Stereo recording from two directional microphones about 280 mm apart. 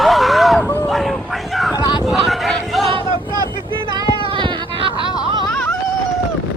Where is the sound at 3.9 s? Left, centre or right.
Centre.